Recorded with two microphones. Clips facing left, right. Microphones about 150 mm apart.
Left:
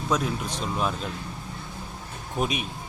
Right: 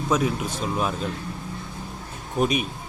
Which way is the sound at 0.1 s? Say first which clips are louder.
Right 3 dB; 5° right (ahead or behind).